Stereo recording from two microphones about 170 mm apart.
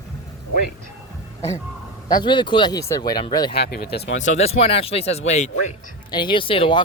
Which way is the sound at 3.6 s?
70° left (ahead or behind).